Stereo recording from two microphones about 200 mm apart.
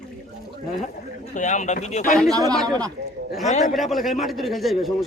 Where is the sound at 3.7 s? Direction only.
Centre (ahead or behind).